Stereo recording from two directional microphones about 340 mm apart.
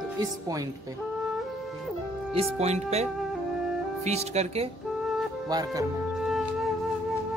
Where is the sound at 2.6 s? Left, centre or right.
Centre.